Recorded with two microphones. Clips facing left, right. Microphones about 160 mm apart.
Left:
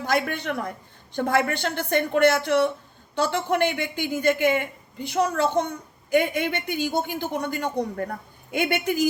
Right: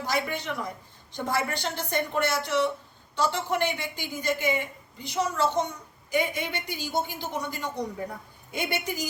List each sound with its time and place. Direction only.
0.0 s a woman's voice: 60° left (ahead or behind)